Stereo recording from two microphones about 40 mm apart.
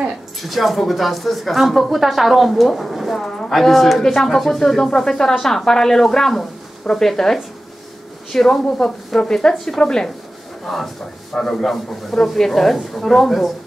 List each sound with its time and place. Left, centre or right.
0.4 s speech: centre
3.2 s a woman's voice: centre
10.6 s speech: centre